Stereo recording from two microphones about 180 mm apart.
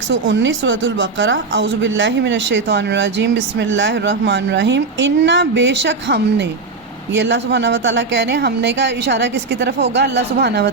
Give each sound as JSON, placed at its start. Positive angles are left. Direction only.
{"t": 0.1, "sound": "a woman's voice", "side_deg": -90}